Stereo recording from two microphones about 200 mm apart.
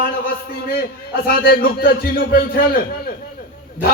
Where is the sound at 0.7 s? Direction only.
50° left (ahead or behind).